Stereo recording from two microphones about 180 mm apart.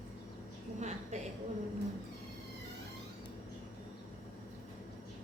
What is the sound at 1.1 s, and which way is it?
Speech, 40° right (ahead or behind).